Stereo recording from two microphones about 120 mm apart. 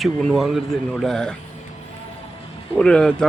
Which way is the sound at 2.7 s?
5° left (ahead or behind).